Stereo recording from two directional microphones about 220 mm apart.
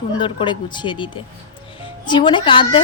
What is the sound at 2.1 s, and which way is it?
Speech, 20° left (ahead or behind).